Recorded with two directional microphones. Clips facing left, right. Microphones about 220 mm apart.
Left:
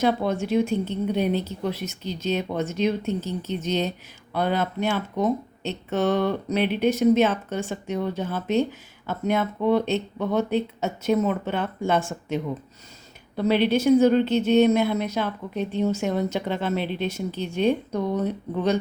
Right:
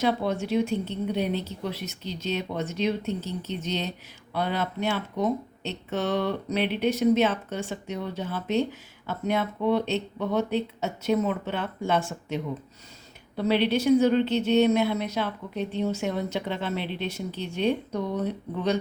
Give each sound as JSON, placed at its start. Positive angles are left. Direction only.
{"t": 0.0, "sound": "a woman's voice", "side_deg": 50}